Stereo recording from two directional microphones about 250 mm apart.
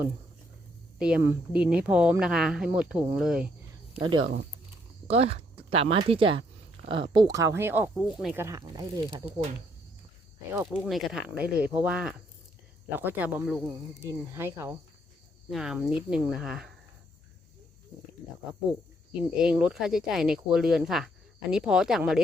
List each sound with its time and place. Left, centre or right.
0.9 s speech: centre
3.9 s speech: centre
10.5 s speech: centre
19.4 s speech: centre